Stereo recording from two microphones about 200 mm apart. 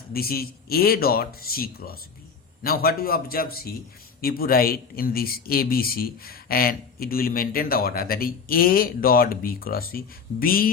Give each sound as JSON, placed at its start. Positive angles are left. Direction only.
{"t": 0.1, "sound": "speech", "side_deg": 50}